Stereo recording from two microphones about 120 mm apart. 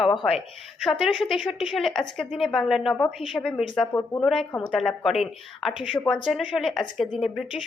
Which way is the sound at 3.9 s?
20° left (ahead or behind).